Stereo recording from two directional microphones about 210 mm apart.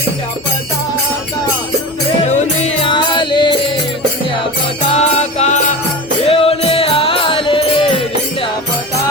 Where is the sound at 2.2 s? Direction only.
35° left (ahead or behind).